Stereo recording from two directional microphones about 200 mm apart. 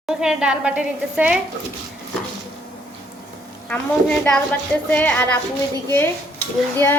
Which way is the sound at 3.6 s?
5° left (ahead or behind).